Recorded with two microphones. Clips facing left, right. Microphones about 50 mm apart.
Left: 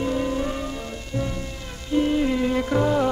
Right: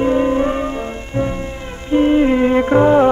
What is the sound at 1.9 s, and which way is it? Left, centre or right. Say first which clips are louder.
Music: right 8 dB; right.